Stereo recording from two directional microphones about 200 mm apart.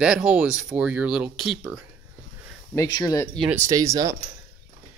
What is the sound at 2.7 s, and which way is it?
Speech, 15° left (ahead or behind).